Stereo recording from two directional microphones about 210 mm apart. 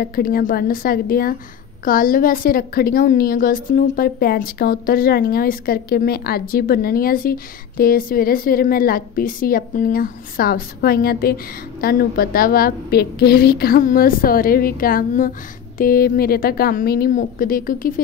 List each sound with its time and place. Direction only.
0.0 s a woman's voice: 45° left (ahead or behind)